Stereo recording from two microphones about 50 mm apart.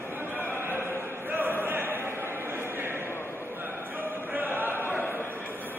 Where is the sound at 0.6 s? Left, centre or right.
Right.